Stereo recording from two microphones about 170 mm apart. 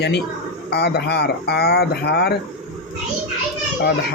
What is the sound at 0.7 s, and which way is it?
Speech, 75° left (ahead or behind).